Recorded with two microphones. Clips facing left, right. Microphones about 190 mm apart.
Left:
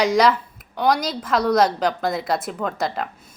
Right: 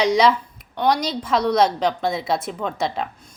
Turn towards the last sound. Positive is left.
turn(degrees=0)  # may be behind; listen again after turning